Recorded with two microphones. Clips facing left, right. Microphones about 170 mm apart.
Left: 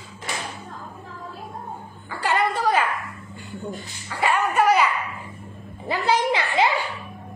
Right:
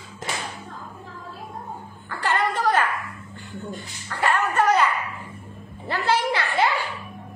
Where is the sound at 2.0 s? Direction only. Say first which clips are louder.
Left 1 dB; 10° left (ahead or behind).